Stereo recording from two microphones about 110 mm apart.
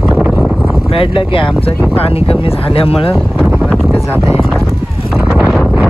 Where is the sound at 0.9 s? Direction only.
55° left (ahead or behind).